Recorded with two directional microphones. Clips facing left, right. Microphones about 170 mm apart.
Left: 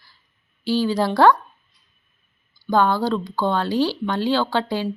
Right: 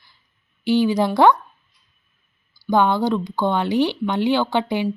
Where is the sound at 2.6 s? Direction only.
20° right (ahead or behind).